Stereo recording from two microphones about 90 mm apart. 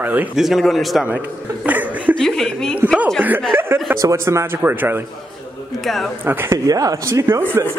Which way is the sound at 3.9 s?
35° right (ahead or behind).